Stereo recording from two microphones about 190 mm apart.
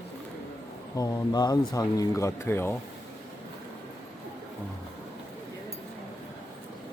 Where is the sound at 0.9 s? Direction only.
20° left (ahead or behind).